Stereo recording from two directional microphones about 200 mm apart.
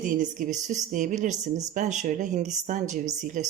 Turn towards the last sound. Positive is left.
turn(degrees=-40)  # may be behind; listen again after turning